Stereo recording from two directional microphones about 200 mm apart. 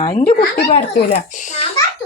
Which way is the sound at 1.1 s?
40° left (ahead or behind).